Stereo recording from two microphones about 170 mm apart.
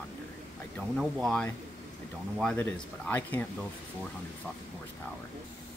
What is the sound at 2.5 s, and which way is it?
Speech, 15° left (ahead or behind).